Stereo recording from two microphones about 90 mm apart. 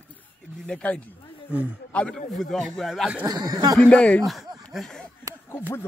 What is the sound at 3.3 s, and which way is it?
Speech, 45° right (ahead or behind).